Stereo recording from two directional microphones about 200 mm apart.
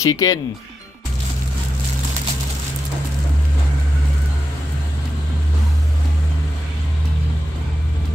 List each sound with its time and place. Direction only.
0.0 s speech: 15° left (ahead or behind)